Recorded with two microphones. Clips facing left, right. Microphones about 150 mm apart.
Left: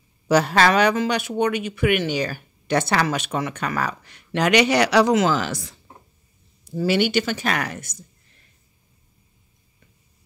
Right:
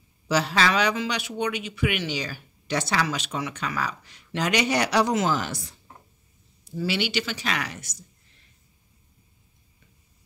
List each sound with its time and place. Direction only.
0.3 s speech: 50° left (ahead or behind); by 5.8 s 90° left
6.6 s speech: 45° left (ahead or behind)